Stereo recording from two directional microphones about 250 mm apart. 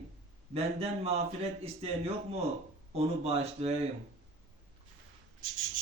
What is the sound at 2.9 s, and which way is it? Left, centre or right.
Speech, right.